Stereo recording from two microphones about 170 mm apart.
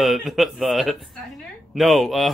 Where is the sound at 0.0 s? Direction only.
Centre (ahead or behind).